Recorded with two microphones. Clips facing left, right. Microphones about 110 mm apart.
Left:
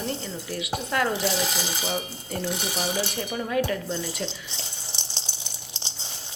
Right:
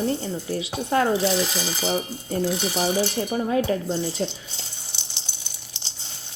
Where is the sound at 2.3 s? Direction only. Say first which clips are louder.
Right 6 dB; 40° right (ahead or behind).